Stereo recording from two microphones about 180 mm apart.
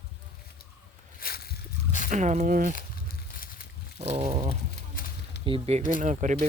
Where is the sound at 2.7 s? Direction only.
55° left (ahead or behind).